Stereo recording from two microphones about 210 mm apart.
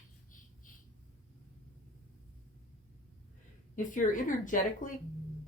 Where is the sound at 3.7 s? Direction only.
40° left (ahead or behind).